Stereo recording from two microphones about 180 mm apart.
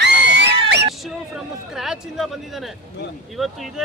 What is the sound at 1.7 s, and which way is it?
Speech, centre (ahead or behind).